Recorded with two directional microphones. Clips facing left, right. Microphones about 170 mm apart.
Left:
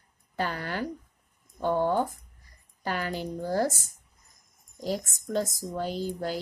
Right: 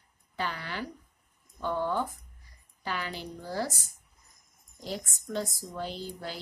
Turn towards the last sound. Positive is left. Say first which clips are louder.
# left 8 dB
turn(degrees=45)  # may be behind; listen again after turning